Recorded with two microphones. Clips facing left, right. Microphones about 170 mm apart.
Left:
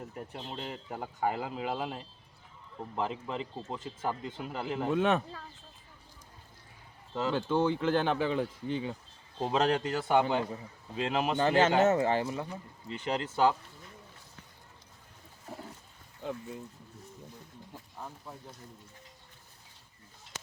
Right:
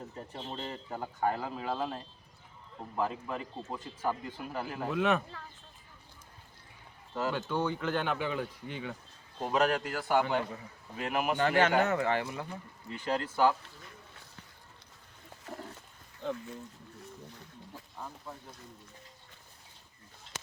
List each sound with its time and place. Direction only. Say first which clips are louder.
0.1 s speech: even; 10° left (ahead or behind); by 5.4 s 30° left (ahead or behind)
7.2 s speech: left 3 dB; 25° left (ahead or behind)
15.5 s wild animals: right 1 dB; 90° right
16.2 s speech: right 2 dB; 10° left (ahead or behind)